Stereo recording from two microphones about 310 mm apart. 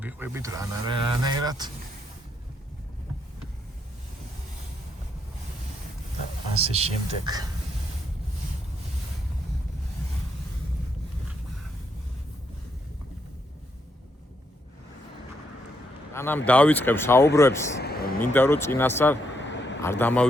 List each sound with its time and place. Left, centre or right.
0.0 s speech: centre
6.6 s speech: centre
16.1 s speech: centre
17.7 s speech: left
18.3 s speech: centre
19.4 s vehicle: left
19.8 s speech: centre